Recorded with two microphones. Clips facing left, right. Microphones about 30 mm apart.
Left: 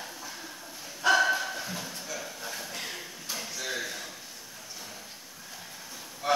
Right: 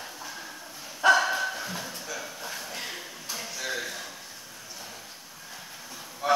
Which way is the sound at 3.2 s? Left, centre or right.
Centre.